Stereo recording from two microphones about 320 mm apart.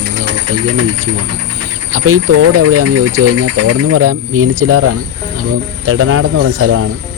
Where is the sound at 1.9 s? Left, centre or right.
Right.